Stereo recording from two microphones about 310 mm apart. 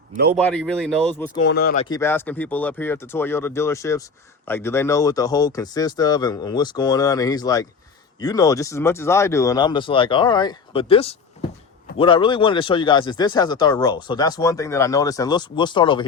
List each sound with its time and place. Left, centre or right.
0.3 s speech: centre
1.4 s speech: left
1.9 s speech: centre